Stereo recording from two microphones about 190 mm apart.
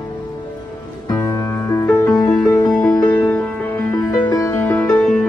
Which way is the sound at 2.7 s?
5° left (ahead or behind).